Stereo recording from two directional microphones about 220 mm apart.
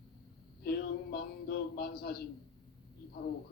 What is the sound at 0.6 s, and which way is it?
A man's voice, 45° left (ahead or behind).